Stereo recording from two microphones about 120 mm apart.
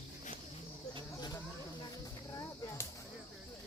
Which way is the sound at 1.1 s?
35° left (ahead or behind).